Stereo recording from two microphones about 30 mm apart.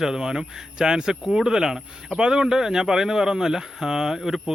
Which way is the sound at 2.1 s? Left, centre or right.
Right.